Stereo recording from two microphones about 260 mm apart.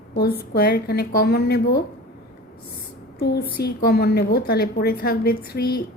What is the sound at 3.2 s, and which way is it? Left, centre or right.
A woman's voice, left.